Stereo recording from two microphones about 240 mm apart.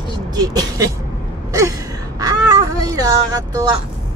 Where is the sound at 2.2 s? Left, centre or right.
Centre.